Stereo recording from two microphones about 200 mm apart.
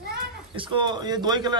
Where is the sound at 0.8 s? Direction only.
20° right (ahead or behind).